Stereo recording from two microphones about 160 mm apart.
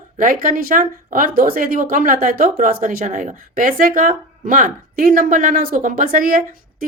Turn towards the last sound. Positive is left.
turn(degrees=-60)  # may be behind; listen again after turning